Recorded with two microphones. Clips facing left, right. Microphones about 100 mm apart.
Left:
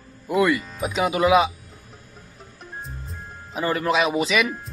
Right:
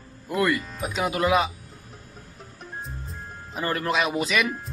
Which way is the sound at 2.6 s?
Centre (ahead or behind).